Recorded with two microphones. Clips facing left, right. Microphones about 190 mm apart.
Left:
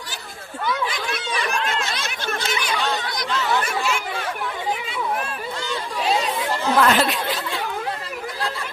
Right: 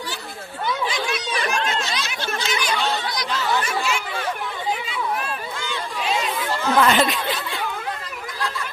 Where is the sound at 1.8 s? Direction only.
50° left (ahead or behind).